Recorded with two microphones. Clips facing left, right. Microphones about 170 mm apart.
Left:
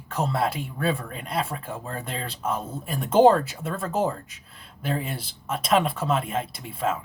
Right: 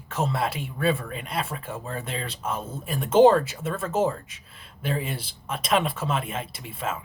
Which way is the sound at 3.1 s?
Centre (ahead or behind).